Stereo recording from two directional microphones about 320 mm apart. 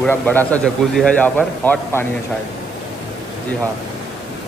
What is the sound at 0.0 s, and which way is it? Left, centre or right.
A man's voice, centre.